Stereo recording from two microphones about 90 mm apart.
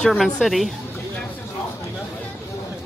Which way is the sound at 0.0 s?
5° left (ahead or behind).